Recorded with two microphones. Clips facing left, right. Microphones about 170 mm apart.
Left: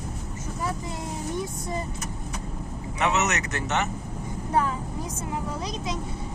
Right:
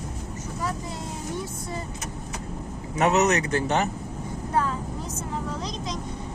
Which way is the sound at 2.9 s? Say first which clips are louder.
Right 5 dB; 40° right (ahead or behind).